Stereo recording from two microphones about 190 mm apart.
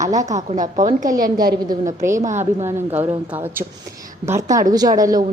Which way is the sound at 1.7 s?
15° right (ahead or behind).